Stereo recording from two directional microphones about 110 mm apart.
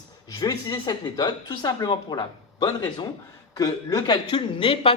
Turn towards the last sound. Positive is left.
turn(degrees=40)  # may be behind; listen again after turning